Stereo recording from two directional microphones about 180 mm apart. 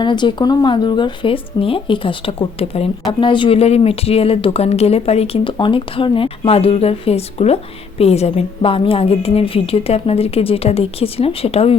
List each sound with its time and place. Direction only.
0.0 s speech: 25° left (ahead or behind)